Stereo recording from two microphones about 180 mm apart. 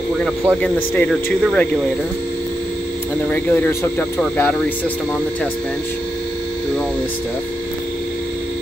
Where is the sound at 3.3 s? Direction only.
10° left (ahead or behind).